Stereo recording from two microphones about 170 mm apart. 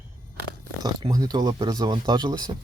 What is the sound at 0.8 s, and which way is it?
Speech, 25° right (ahead or behind).